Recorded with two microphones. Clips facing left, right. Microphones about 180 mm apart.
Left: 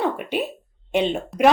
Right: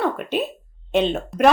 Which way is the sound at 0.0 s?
15° left (ahead or behind).